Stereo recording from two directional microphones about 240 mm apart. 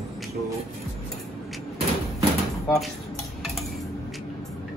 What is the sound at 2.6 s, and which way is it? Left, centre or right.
Speech, centre.